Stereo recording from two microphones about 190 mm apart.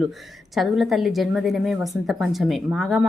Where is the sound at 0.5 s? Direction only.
Centre (ahead or behind).